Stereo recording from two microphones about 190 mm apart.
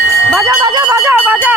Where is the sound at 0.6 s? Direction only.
25° right (ahead or behind).